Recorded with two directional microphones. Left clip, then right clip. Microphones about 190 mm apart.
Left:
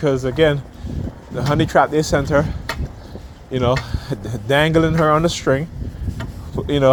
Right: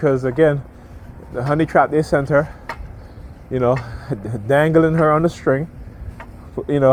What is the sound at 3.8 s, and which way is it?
Speech, 50° right (ahead or behind).